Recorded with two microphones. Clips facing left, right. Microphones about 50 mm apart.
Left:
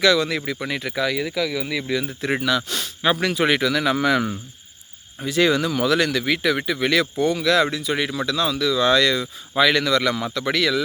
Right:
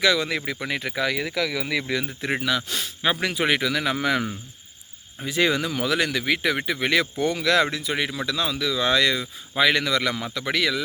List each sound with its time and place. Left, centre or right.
0.0 s speech: centre
0.3 s speech: right
2.4 s speech: centre
5.2 s speech: right
7.2 s speech: right
7.9 s speech: centre